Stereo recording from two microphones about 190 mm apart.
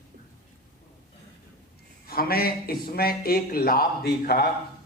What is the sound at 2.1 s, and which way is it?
Speech, 50° left (ahead or behind).